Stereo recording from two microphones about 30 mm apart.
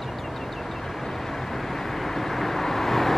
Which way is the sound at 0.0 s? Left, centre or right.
Centre.